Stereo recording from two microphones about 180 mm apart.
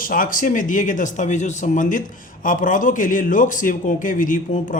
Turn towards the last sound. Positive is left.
turn(degrees=50)  # may be behind; listen again after turning